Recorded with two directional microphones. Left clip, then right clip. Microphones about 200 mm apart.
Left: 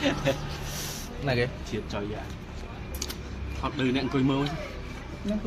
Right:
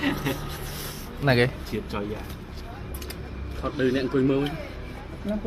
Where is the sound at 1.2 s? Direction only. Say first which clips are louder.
Right 6 dB; 30° right (ahead or behind).